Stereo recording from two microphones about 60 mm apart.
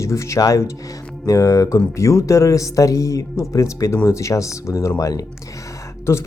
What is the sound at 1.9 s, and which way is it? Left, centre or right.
Speech, left.